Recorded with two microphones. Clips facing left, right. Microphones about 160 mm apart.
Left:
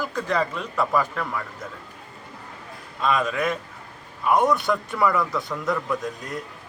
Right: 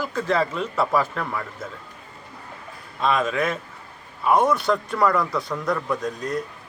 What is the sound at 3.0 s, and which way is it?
A man's voice, centre (ahead or behind).